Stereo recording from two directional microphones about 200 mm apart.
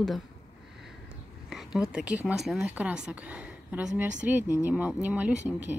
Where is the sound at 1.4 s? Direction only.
Centre (ahead or behind).